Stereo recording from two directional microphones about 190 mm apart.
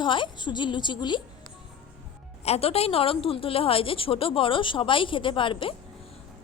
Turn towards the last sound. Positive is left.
turn(degrees=25)  # may be behind; listen again after turning